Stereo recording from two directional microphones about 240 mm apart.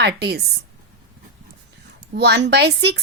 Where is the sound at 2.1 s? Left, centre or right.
Right.